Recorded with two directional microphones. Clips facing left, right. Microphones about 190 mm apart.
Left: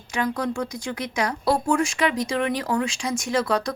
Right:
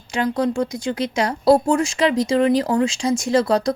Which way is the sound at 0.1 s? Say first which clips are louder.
Right 5 dB; 25° right (ahead or behind).